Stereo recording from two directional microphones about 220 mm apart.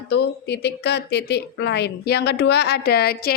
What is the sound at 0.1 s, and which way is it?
Speech, 50° left (ahead or behind).